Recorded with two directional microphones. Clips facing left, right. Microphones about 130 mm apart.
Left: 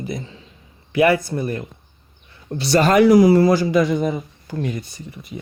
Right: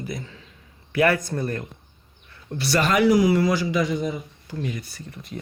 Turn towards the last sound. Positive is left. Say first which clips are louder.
# left 2 dB
turn(degrees=5)  # may be behind; listen again after turning